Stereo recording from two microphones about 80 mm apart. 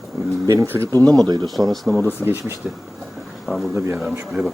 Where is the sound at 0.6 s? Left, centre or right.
Right.